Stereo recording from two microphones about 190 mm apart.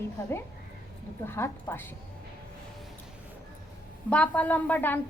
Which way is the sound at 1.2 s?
15° left (ahead or behind).